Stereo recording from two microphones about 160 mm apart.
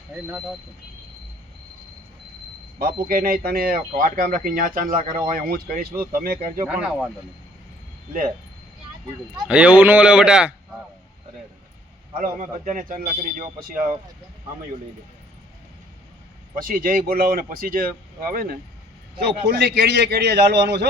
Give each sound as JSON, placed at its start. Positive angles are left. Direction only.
{"t": 0.3, "sound": "a man's voice", "side_deg": -10}
{"t": 3.1, "sound": "speech", "side_deg": -65}
{"t": 6.7, "sound": "speech", "side_deg": -5}
{"t": 9.5, "sound": "a man's voice", "side_deg": -10}
{"t": 12.1, "sound": "speech", "side_deg": -55}
{"t": 16.6, "sound": "speech", "side_deg": -60}
{"t": 19.2, "sound": "a man's voice", "side_deg": -90}